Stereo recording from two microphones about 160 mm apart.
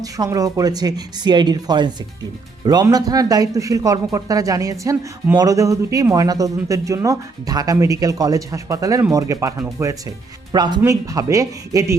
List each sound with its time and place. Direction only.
0.0 s speech: 20° right (ahead or behind)